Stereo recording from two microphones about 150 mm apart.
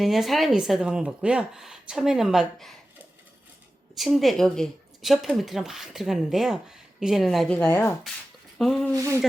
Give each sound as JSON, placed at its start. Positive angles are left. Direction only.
{"t": 0.0, "sound": "speech", "side_deg": 0}
{"t": 3.9, "sound": "speech", "side_deg": 0}
{"t": 8.5, "sound": "speech", "side_deg": 0}